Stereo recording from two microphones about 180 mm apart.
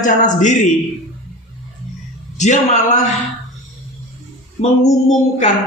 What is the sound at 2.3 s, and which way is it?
Speech, 40° left (ahead or behind).